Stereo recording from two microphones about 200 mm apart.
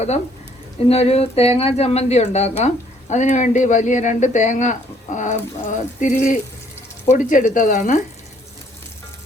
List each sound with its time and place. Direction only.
0.9 s speech: 30° left (ahead or behind)